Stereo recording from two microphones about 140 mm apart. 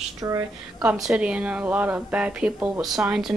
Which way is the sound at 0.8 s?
5° right (ahead or behind).